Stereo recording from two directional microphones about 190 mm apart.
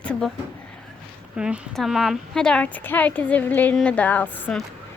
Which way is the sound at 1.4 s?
5° right (ahead or behind).